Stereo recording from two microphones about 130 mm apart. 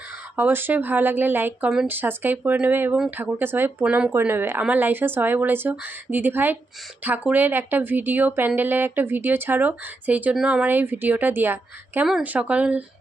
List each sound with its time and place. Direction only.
0.3 s speech: 15° right (ahead or behind)